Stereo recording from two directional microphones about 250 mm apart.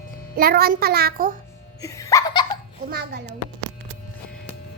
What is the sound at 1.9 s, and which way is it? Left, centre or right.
Baby laughter, centre.